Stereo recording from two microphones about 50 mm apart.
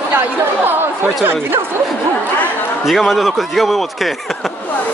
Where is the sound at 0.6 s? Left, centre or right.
Right.